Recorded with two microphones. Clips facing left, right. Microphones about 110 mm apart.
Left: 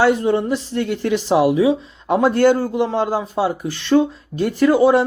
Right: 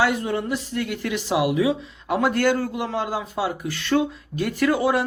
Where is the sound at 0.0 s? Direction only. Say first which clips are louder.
Left 6 dB; 30° left (ahead or behind).